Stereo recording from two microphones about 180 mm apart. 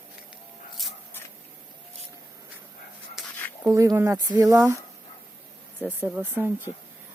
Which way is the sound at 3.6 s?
15° right (ahead or behind).